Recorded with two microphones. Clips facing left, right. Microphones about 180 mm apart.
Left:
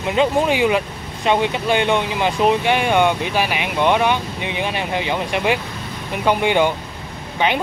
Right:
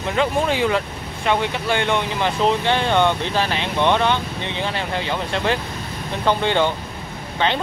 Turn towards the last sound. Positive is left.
turn(degrees=15)  # may be behind; listen again after turning